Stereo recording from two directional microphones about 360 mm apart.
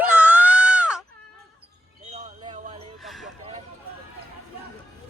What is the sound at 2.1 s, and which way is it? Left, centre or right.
Basketball bounce, centre.